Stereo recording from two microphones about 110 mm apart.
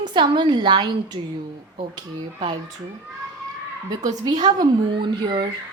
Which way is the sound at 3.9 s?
35° right (ahead or behind).